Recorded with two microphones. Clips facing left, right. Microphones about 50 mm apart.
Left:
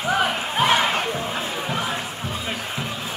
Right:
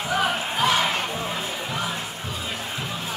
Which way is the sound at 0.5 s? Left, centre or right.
Left.